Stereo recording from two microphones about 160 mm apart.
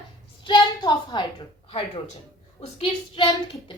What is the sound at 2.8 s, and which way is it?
Speech, 30° left (ahead or behind).